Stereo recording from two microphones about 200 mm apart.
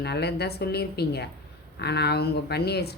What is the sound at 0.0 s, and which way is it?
Speech, 55° left (ahead or behind).